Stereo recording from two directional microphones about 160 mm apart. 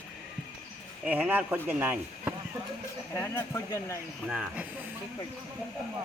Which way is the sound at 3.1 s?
20° left (ahead or behind).